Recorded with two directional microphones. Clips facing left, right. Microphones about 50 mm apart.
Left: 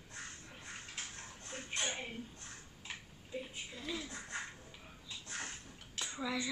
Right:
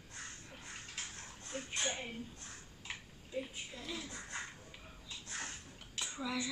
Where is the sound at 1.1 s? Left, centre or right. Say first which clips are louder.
Right 2 dB; left.